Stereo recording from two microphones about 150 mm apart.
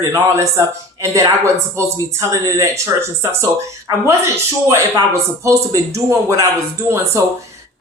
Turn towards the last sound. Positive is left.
turn(degrees=-20)  # may be behind; listen again after turning